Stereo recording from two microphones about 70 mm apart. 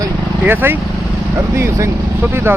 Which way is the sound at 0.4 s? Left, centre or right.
Right.